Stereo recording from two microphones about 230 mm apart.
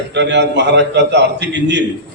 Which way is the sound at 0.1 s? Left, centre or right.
Right.